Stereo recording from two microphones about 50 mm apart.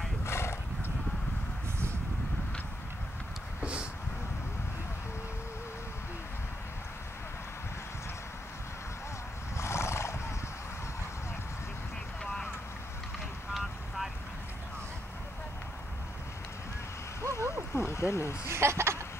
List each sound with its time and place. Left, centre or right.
0.2 s horse: left
9.6 s neigh: left
13.5 s vehicle: centre
17.2 s a sound: right
17.7 s speech: left
18.5 s speech: right